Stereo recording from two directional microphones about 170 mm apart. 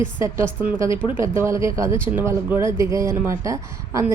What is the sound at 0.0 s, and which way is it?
Speech, 15° right (ahead or behind).